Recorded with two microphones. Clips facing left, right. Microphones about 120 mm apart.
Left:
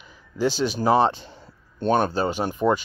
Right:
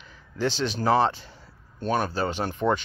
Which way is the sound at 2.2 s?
15° left (ahead or behind).